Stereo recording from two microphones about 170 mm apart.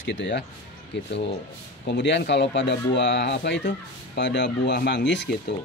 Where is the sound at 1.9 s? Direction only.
90° left.